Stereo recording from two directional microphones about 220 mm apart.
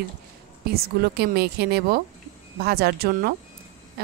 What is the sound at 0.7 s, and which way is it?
A woman's voice, 45° right (ahead or behind).